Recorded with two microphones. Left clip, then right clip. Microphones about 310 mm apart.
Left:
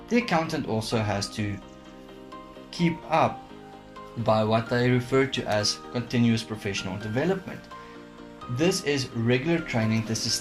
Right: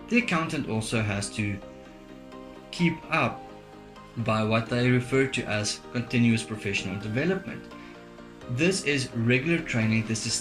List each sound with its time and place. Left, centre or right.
0.1 s speech: centre
2.7 s speech: centre
4.4 s speech: centre
8.5 s speech: centre